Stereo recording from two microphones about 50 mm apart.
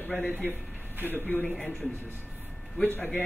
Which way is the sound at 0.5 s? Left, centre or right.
Right.